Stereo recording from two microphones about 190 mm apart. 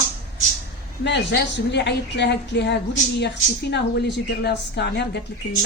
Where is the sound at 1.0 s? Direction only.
65° left (ahead or behind).